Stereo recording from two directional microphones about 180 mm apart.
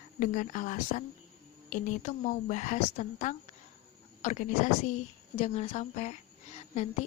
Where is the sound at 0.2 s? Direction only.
45° left (ahead or behind).